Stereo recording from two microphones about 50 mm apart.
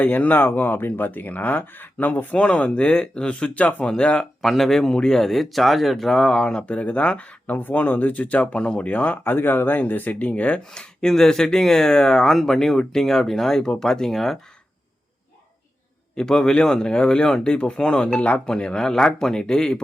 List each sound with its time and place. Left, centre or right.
0.0 s speech: left
2.4 s speech: left
4.4 s speech: centre; by 9.1 s left
9.2 s speech: left
10.2 s speech: left
10.7 s speech: centre
16.1 s speech: centre